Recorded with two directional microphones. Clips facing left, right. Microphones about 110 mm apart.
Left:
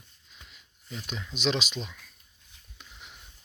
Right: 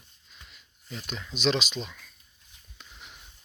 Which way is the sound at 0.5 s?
5° left (ahead or behind).